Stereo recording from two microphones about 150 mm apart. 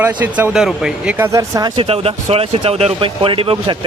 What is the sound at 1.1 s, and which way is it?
Speech, 20° right (ahead or behind).